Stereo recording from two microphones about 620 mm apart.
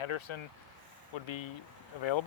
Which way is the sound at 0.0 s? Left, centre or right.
Left.